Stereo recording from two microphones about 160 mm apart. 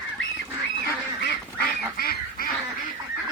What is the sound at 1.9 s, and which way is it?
Goose, 65° left (ahead or behind).